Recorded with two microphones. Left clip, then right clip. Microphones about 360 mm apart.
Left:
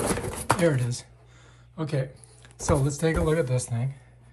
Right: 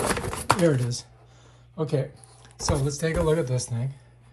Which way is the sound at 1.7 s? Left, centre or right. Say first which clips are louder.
Right 3 dB; centre.